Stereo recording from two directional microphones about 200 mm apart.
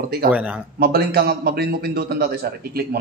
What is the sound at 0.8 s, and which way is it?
A man's voice, 50° right (ahead or behind).